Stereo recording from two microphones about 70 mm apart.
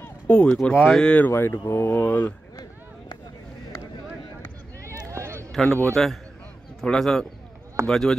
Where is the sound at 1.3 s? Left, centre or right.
Left.